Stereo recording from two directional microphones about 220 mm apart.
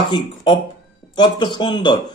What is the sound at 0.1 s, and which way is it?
Speech, 20° left (ahead or behind).